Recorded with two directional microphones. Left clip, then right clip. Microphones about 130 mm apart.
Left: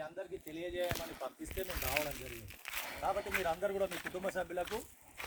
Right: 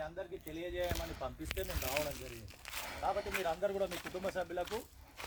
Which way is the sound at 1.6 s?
10° left (ahead or behind).